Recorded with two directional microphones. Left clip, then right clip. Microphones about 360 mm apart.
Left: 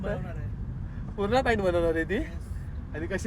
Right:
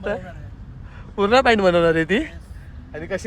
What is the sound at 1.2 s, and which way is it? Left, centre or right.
Speech, right.